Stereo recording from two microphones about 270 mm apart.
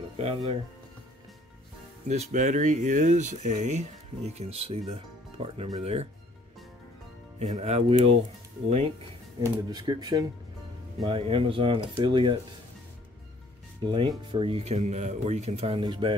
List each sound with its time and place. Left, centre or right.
0.2 s speech: right
2.0 s speech: right
7.3 s speech: right
9.7 s speech: centre
13.8 s speech: centre